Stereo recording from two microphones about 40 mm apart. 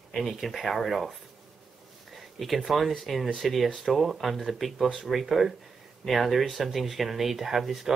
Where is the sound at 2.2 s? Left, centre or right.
Centre.